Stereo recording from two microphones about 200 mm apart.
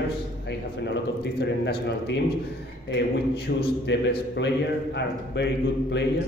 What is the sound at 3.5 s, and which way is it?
A man's voice, 55° left (ahead or behind).